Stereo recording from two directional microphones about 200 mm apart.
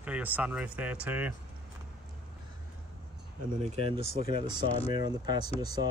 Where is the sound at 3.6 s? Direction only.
30° right (ahead or behind).